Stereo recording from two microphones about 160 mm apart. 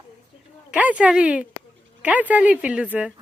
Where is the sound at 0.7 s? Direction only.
10° right (ahead or behind).